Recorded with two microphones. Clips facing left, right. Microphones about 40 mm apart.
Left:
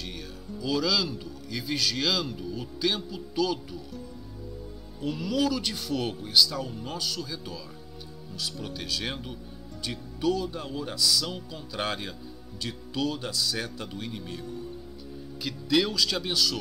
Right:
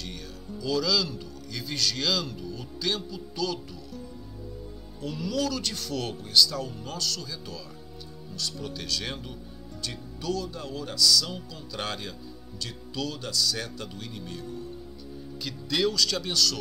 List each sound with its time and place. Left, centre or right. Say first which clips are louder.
0.6 s a man's voice: even; centre
5.0 s a man's voice: left 2 dB; centre